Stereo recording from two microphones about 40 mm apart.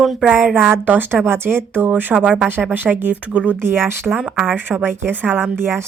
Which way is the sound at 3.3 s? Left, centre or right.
Right.